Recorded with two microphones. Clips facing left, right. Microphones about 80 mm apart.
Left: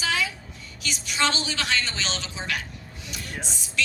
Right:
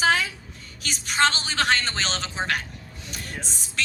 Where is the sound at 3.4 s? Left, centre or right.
Right.